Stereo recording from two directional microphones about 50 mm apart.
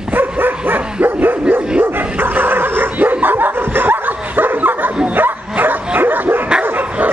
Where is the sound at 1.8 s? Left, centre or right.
Right.